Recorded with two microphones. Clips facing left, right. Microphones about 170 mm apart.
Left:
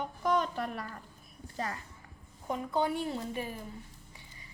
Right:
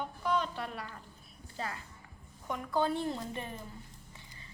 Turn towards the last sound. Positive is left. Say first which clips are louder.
# left 1 dB
turn(degrees=5)  # may be behind; listen again after turning